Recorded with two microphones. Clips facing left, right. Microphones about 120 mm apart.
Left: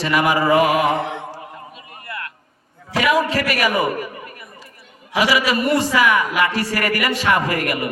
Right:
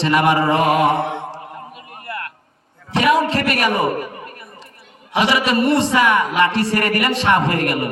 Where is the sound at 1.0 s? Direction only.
20° right (ahead or behind).